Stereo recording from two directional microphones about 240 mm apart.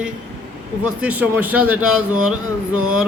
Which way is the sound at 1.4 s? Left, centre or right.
Right.